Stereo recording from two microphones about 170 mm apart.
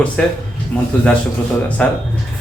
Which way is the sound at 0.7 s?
10° left (ahead or behind).